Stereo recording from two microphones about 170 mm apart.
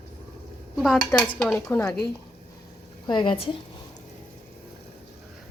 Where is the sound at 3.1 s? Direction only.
25° left (ahead or behind).